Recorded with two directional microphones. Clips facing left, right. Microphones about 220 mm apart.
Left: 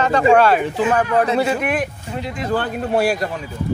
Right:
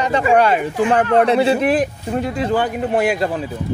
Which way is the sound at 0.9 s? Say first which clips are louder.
Right 4 dB; 25° right (ahead or behind).